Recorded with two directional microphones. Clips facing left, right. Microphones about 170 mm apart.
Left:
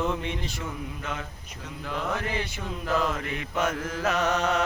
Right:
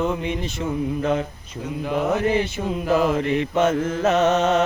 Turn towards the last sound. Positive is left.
turn(degrees=-25)  # may be behind; listen again after turning